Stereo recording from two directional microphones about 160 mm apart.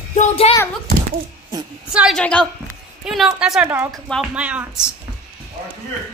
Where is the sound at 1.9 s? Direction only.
5° right (ahead or behind).